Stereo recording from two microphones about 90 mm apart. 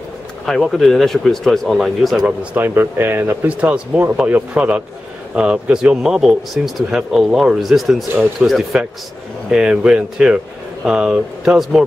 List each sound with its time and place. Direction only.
0.5 s speech: centre (ahead or behind)
2.5 s speech: 25° right (ahead or behind); by 11.8 s 5° right (ahead or behind)